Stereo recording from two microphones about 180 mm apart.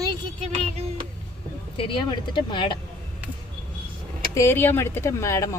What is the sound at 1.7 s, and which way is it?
Speech, 30° left (ahead or behind).